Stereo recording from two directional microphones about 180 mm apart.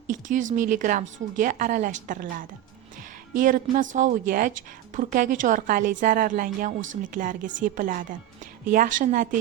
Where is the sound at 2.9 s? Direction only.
50° right (ahead or behind).